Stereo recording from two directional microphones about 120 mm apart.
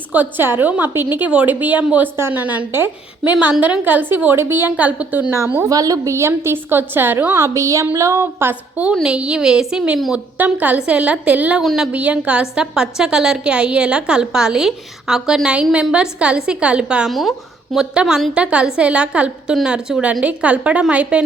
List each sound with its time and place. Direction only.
0.1 s a woman's voice: 15° right (ahead or behind)
11.6 s a woman's voice: centre (ahead or behind)
11.9 s a woman's voice: 10° right (ahead or behind)